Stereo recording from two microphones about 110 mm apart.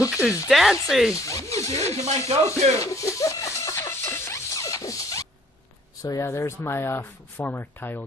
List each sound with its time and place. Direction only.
0.1 s speech: 10° right (ahead or behind)
1.1 s a sound: 30° left (ahead or behind)
2.0 s speech: 75° right (ahead or behind)
2.8 s music: 30° left (ahead or behind)
6.0 s speech: 30° left (ahead or behind)